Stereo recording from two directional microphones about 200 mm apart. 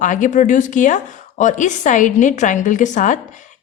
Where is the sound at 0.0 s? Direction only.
40° left (ahead or behind).